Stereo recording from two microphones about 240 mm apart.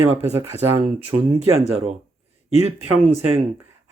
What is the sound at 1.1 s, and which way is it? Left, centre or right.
Speech, right.